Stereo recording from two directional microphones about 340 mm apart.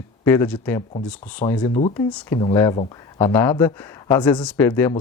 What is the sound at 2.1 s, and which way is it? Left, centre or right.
Speech, centre.